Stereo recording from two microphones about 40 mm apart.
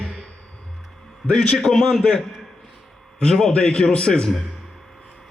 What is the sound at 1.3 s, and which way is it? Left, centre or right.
Speech, centre.